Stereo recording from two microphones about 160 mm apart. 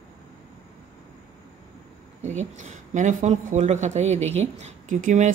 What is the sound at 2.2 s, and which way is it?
Speech, 50° right (ahead or behind).